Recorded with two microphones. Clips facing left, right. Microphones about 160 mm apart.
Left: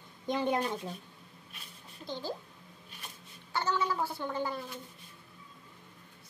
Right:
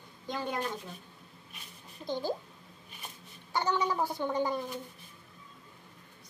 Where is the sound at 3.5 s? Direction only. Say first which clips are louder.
Right 2 dB; 15° right (ahead or behind).